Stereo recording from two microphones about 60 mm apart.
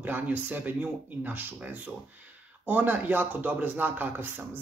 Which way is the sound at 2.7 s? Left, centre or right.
Right.